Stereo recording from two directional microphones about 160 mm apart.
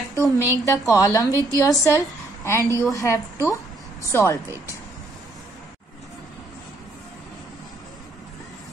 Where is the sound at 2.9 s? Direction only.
20° left (ahead or behind).